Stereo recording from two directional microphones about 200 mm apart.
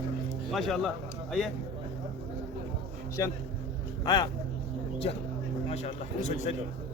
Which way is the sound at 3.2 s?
15° left (ahead or behind).